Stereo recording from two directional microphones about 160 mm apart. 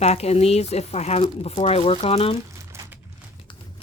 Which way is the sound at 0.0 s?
40° left (ahead or behind).